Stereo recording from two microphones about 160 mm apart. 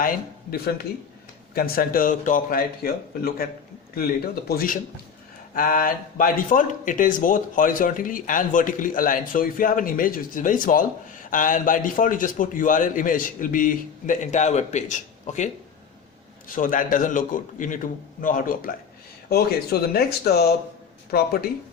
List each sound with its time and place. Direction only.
1.5 s a man's voice: 70° left (ahead or behind); by 15.4 s 50° left (ahead or behind)
16.5 s speech: 60° left (ahead or behind)
19.3 s speech: 75° left (ahead or behind)
21.1 s a man's voice: 75° left (ahead or behind)